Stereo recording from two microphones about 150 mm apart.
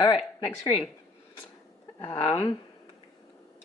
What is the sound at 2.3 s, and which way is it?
Speech, 40° left (ahead or behind).